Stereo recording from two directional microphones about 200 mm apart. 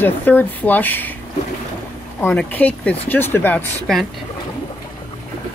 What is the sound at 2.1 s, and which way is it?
Speech, 10° left (ahead or behind).